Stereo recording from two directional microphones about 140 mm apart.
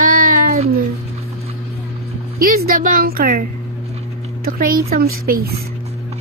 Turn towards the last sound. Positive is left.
turn(degrees=-90)